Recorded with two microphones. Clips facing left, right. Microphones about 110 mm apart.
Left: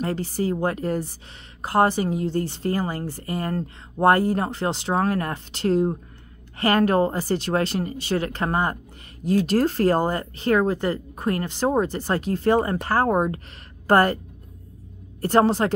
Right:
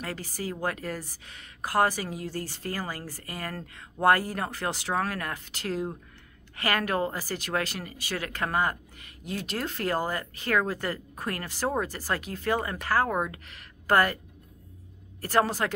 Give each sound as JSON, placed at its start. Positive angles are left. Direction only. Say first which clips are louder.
{"t": 0.0, "sound": "a woman's voice", "louder": "left 10 dB", "side_deg": 30}
{"t": 15.2, "sound": "a woman's voice", "louder": "left 7 dB", "side_deg": 25}